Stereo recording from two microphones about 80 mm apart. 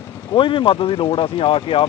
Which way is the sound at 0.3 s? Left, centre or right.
Left.